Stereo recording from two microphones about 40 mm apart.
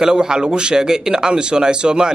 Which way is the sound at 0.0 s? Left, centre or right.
Centre.